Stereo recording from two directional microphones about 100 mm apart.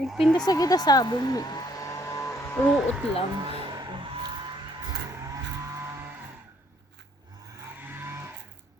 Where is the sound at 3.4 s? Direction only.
50° right (ahead or behind).